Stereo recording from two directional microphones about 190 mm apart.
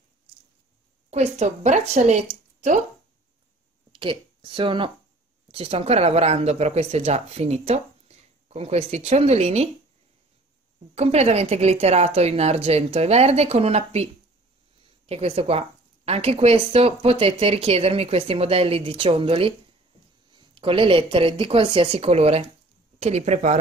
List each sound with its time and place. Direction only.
1.1 s speech: 35° right (ahead or behind)
3.9 s speech: 25° right (ahead or behind)
11.0 s speech: 35° right (ahead or behind)
15.0 s speech: 30° right (ahead or behind)
20.5 s a woman's voice: 30° right (ahead or behind)